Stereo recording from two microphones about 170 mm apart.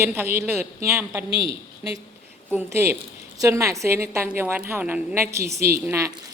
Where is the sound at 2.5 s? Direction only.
15° right (ahead or behind).